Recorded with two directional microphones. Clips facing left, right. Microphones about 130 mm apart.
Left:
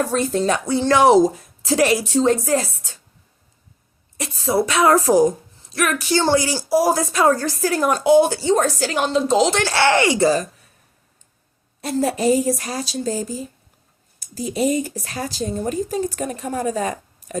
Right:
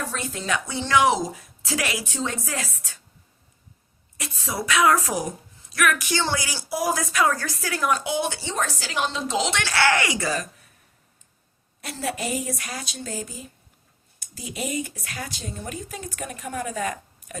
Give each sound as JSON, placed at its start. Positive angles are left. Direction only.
{"t": 0.1, "sound": "speech", "side_deg": 40}
{"t": 4.2, "sound": "speech", "side_deg": 30}
{"t": 11.8, "sound": "speech", "side_deg": 35}